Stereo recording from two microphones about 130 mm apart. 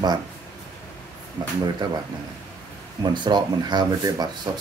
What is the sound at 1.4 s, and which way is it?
Speech, 30° right (ahead or behind).